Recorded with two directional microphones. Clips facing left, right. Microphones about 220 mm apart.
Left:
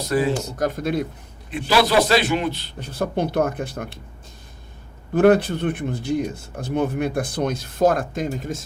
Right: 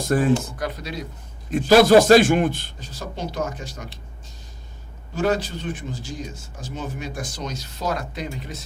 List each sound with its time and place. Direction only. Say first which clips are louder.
0.0 s a man's voice: right 1 dB; 50° right (ahead or behind)
0.6 s speech: left 7 dB; 50° left (ahead or behind)
1.5 s a man's voice: right 6 dB; 45° right (ahead or behind)
2.7 s speech: left 9 dB; 60° left (ahead or behind)
5.1 s speech: left 8 dB; 55° left (ahead or behind)